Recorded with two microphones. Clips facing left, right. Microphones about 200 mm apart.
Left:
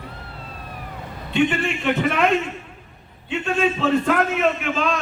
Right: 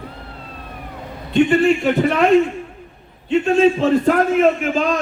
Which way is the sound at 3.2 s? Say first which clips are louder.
Right 8 dB; 40° right (ahead or behind).